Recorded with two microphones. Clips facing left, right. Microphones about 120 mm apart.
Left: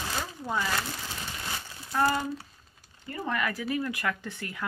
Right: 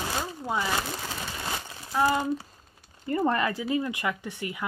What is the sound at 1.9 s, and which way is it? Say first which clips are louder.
Speech: right 2 dB; 15° right (ahead or behind).